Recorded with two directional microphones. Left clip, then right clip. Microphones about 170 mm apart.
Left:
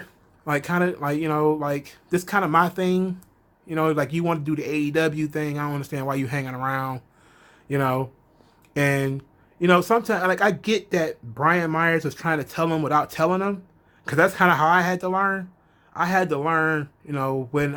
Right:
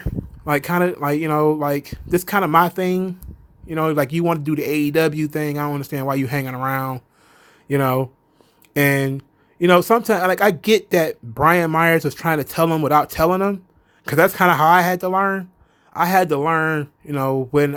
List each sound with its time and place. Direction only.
0.0 s speech: 35° right (ahead or behind)